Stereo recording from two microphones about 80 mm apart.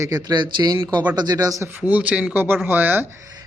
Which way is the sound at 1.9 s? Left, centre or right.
Centre.